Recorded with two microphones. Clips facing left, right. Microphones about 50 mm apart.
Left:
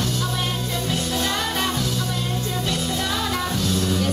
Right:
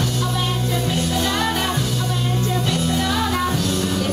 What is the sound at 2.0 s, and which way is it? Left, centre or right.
Music, right.